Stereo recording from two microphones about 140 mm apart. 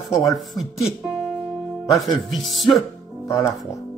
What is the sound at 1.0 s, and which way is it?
Music, centre (ahead or behind).